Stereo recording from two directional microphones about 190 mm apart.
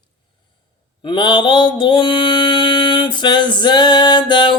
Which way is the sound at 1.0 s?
25° left (ahead or behind).